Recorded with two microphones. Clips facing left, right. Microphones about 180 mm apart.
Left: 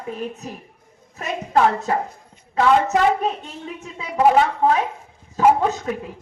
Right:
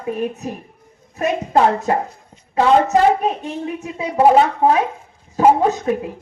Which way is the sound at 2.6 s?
25° right (ahead or behind).